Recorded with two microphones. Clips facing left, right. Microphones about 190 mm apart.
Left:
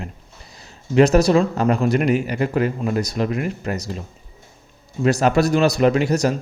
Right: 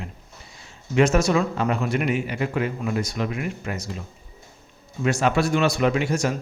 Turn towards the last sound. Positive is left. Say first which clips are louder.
# left 5 dB
turn(degrees=40)  # may be behind; listen again after turning